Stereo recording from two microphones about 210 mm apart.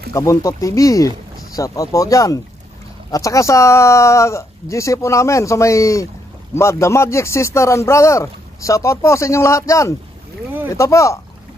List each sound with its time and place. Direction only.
0.1 s speech: 15° left (ahead or behind)